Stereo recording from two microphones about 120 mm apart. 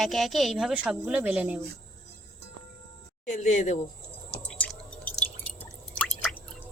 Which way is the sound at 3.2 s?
85° left.